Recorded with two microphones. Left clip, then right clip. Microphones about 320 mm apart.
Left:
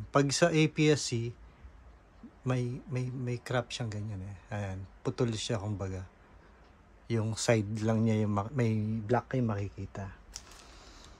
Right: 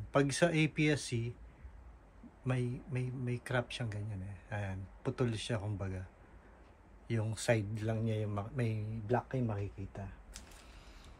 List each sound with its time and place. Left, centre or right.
0.1 s a man's voice: centre
2.4 s a man's voice: centre
7.1 s a man's voice: centre